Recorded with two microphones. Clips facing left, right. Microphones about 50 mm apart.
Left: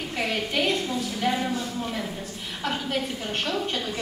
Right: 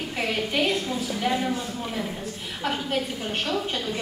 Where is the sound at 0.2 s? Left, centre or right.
Centre.